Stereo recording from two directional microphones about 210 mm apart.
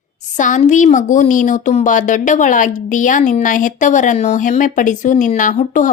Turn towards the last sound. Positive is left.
turn(degrees=40)  # may be behind; listen again after turning